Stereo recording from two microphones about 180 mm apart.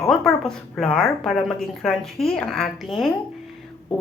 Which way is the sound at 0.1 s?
Centre (ahead or behind).